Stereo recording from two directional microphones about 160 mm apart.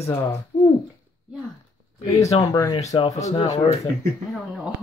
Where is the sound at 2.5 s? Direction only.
20° left (ahead or behind).